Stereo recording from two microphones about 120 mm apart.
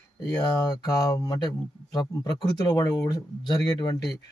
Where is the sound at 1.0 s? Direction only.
30° left (ahead or behind).